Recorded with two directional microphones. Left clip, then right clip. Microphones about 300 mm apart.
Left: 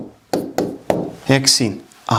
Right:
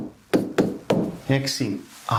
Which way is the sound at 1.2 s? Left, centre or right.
Left.